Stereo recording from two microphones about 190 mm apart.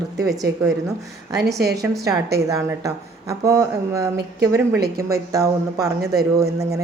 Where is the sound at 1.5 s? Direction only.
60° right (ahead or behind).